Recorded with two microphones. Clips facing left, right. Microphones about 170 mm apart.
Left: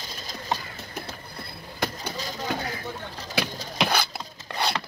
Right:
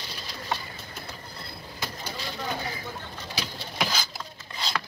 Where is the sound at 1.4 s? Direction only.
55° left (ahead or behind).